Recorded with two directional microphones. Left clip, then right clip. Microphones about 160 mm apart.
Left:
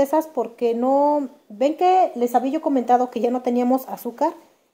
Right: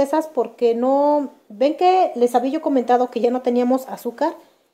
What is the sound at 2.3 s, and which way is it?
Speech, 5° right (ahead or behind).